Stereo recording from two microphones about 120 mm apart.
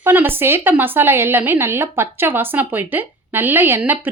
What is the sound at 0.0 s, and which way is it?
A woman's voice, 15° right (ahead or behind).